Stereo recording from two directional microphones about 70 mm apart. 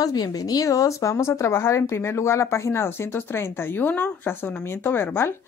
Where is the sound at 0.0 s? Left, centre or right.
Left.